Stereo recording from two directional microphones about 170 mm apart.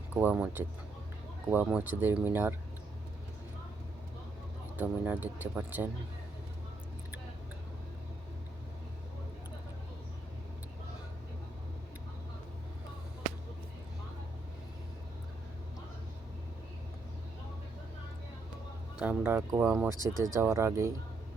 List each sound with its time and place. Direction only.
0.1 s speech: 10° right (ahead or behind)
4.8 s speech: 10° right (ahead or behind)
18.9 s speech: 10° right (ahead or behind)